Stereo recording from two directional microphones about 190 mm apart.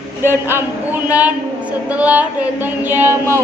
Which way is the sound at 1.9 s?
5° right (ahead or behind).